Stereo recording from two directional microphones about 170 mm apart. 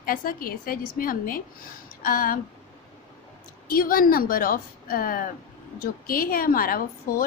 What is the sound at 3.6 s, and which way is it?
A woman's voice, 60° left (ahead or behind).